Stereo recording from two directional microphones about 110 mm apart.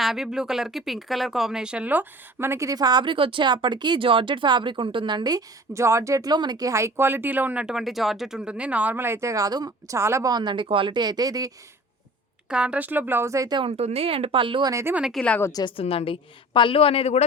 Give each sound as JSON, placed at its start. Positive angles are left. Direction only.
{"t": 0.0, "sound": "speech", "side_deg": -5}
{"t": 12.5, "sound": "speech", "side_deg": -10}
{"t": 13.7, "sound": "speech", "side_deg": -70}
{"t": 14.7, "sound": "speech", "side_deg": -25}
{"t": 14.9, "sound": "speech", "side_deg": -5}
{"t": 15.7, "sound": "a woman's voice", "side_deg": 60}